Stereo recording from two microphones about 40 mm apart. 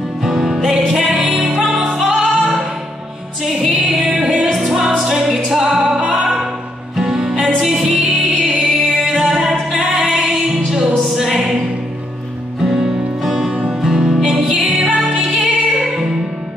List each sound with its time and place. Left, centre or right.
0.2 s music: centre
1.1 s music: right
2.0 s music: centre
4.0 s music: right
4.5 s music: centre
5.9 s music: right
7.0 s music: centre
12.6 s music: centre